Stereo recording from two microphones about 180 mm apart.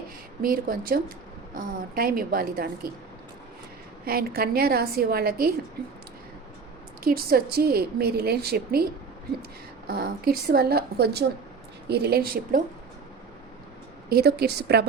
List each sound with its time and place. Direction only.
0.4 s a woman's voice: 55° right (ahead or behind)
4.0 s a woman's voice: 55° right (ahead or behind)
7.0 s a woman's voice: 55° right (ahead or behind)
14.1 s a woman's voice: 60° right (ahead or behind)